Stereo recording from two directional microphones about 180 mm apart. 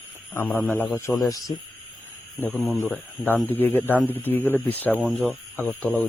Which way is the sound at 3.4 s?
10° left (ahead or behind).